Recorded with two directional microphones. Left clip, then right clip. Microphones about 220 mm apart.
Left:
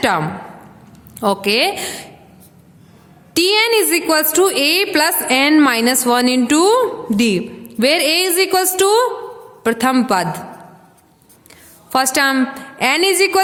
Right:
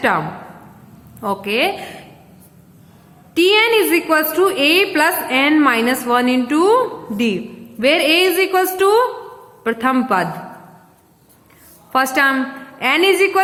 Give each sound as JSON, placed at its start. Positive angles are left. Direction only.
{"t": 1.2, "sound": "a woman's voice", "side_deg": 45}
{"t": 3.3, "sound": "a woman's voice", "side_deg": 50}
{"t": 11.9, "sound": "a woman's voice", "side_deg": 50}